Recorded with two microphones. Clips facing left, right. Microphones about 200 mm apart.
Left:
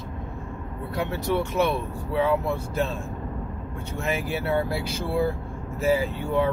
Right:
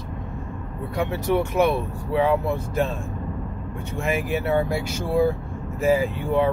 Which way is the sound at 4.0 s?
15° right (ahead or behind).